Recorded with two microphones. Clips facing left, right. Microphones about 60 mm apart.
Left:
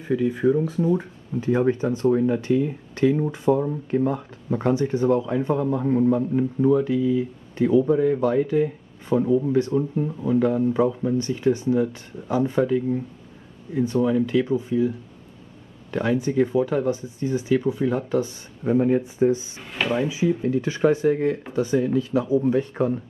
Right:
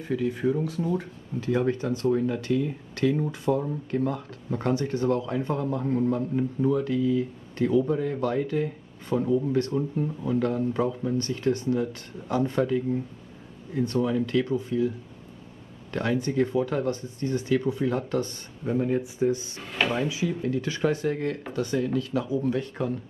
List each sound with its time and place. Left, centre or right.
0.0 s speech: centre
15.9 s speech: centre
19.7 s speech: centre
20.1 s speech: centre